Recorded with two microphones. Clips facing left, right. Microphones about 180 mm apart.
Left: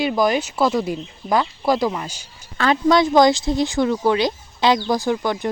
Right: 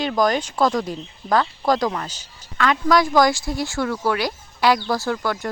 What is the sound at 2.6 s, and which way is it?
Speech, 30° left (ahead or behind).